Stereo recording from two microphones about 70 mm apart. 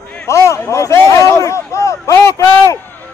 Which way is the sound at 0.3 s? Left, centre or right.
Left.